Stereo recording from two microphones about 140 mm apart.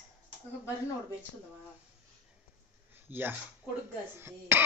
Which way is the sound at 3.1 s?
15° right (ahead or behind).